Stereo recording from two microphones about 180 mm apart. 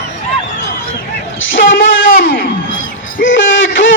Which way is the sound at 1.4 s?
90° left.